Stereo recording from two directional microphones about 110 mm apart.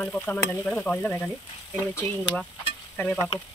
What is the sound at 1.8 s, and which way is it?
Speech, 25° left (ahead or behind).